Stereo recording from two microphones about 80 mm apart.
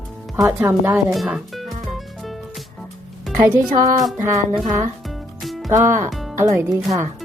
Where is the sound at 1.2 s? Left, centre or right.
Centre.